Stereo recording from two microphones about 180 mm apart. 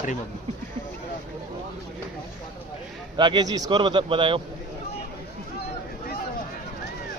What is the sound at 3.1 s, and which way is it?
A man's voice, 25° right (ahead or behind).